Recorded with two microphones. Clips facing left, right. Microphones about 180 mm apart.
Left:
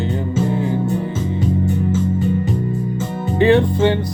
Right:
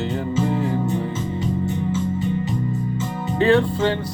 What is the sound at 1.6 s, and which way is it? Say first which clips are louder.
Music: left 4 dB; 45° left (ahead or behind).